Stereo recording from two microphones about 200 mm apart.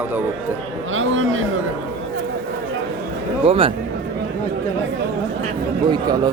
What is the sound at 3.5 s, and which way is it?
Speech, 30° right (ahead or behind).